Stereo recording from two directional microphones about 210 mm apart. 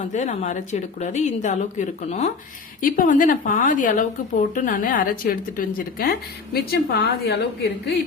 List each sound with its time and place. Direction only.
0.0 s a woman's voice: 35° left (ahead or behind); by 7.9 s 50° left (ahead or behind)